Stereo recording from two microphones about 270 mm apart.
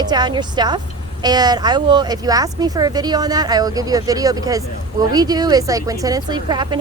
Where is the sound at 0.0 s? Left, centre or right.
Centre.